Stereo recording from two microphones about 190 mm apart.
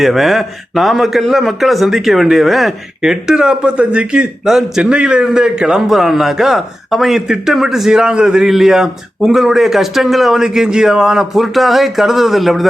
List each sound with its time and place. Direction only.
0.0 s a man's voice: centre (ahead or behind)